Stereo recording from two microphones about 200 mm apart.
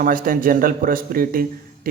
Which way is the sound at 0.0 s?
45° right (ahead or behind).